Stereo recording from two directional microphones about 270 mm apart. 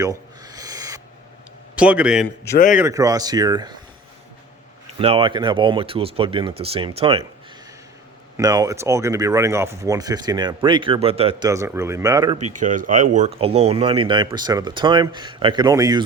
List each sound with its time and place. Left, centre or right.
0.0 s owl: centre
1.8 s a man's voice: centre
4.9 s speech: centre
8.4 s speech: centre
12.5 s speech: right; by 16.0 s centre